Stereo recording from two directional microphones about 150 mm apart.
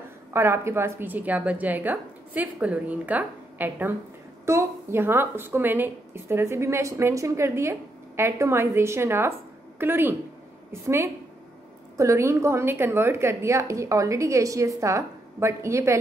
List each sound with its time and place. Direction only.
0.3 s a woman's voice: 15° right (ahead or behind)